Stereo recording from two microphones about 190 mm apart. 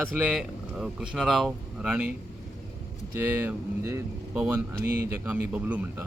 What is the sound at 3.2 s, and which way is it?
Speech, 10° right (ahead or behind).